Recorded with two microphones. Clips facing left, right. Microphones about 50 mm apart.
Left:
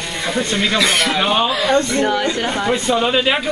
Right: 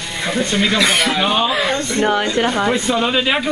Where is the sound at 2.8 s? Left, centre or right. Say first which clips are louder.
Left 1 dB; centre.